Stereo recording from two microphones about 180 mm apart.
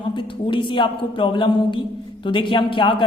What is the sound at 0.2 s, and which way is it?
A man's voice, 25° left (ahead or behind).